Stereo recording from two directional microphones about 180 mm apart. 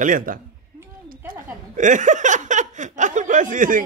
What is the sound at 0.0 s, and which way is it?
Speech, 50° right (ahead or behind).